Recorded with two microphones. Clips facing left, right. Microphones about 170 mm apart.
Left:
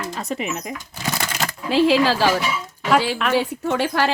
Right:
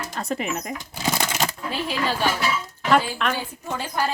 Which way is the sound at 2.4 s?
Centre (ahead or behind).